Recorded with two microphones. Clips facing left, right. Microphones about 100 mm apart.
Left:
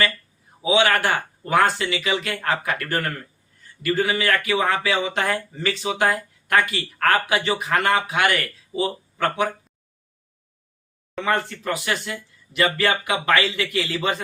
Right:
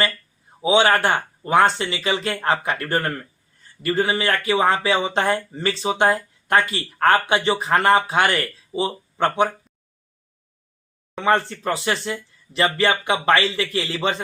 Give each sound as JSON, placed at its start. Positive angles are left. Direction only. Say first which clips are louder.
{"t": 0.6, "sound": "speech", "louder": "right 2 dB", "side_deg": -30}
{"t": 11.2, "sound": "speech", "louder": "right 4 dB", "side_deg": -30}